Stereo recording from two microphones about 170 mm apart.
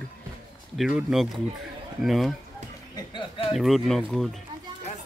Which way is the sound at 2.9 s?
30° left (ahead or behind).